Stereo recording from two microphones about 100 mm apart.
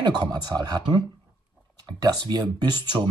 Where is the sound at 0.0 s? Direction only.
45° right (ahead or behind).